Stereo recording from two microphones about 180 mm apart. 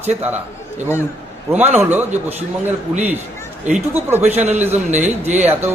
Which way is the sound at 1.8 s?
10° right (ahead or behind).